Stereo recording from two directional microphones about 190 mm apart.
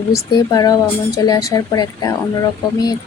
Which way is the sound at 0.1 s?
20° left (ahead or behind).